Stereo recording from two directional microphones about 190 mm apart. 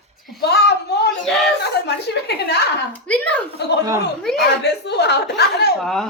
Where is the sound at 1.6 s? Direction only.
60° left (ahead or behind).